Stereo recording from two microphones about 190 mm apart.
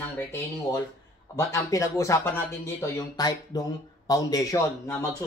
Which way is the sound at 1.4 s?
15° left (ahead or behind).